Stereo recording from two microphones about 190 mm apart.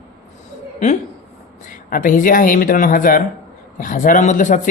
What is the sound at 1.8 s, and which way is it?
Speech, 45° left (ahead or behind).